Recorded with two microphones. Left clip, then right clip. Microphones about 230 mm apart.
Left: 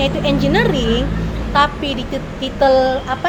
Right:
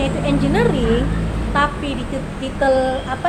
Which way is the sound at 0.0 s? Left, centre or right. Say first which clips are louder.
Left 3 dB; left.